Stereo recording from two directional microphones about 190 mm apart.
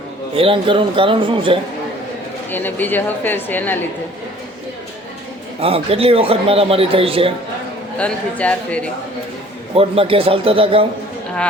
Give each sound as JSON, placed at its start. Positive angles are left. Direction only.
{"t": 0.3, "sound": "a man's voice", "side_deg": -30}
{"t": 2.5, "sound": "a woman's voice", "side_deg": 10}
{"t": 5.5, "sound": "a man's voice", "side_deg": -30}
{"t": 7.9, "sound": "a woman's voice", "side_deg": 5}
{"t": 9.7, "sound": "a man's voice", "side_deg": -30}